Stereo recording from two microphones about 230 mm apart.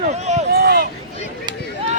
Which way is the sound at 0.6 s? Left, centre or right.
Right.